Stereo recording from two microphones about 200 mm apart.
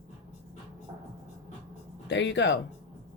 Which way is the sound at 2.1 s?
65° left (ahead or behind).